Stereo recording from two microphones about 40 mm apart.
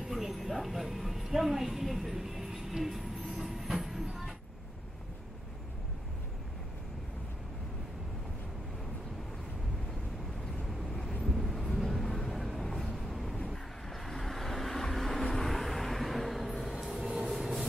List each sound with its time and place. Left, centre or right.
0.1 s speech: centre
3.3 s train: centre
10.6 s vehicle: centre